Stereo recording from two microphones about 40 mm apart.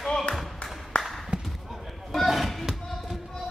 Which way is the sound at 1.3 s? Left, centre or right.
Right.